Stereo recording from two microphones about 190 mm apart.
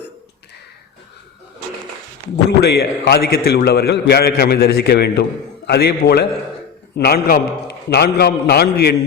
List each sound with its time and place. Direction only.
2.6 s a man's voice: 60° left (ahead or behind)